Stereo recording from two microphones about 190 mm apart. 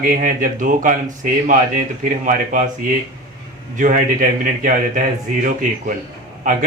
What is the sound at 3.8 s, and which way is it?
Speech, 45° right (ahead or behind).